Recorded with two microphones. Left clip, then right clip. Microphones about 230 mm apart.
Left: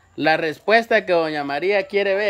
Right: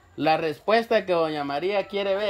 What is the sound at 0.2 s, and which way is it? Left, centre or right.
Speech, centre.